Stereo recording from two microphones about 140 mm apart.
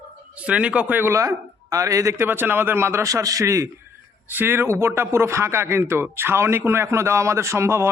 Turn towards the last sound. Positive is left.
turn(degrees=-20)  # may be behind; listen again after turning